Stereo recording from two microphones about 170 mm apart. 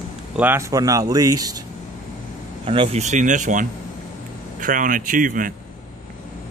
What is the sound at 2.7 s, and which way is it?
Speech, 35° right (ahead or behind).